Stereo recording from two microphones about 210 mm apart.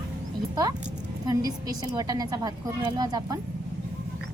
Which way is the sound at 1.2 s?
15° right (ahead or behind).